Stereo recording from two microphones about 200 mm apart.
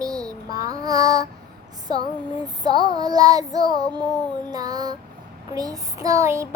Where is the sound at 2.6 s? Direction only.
20° right (ahead or behind).